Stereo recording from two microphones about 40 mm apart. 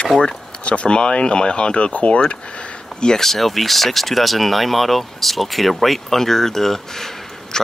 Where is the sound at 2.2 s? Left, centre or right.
Left.